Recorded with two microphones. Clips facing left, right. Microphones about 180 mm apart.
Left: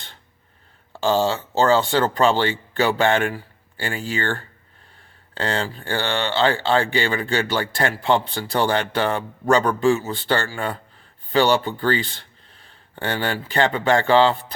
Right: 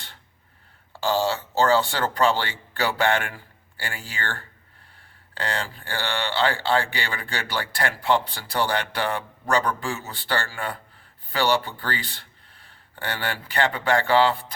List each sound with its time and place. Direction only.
1.0 s speech: 20° left (ahead or behind)
13.0 s speech: 25° left (ahead or behind)